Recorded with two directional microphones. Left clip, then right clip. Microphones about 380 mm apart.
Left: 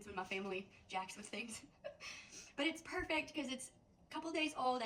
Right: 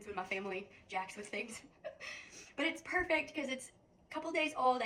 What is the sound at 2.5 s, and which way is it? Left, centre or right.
Speech, centre.